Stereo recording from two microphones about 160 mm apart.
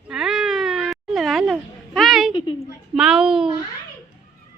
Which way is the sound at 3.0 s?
5° right (ahead or behind).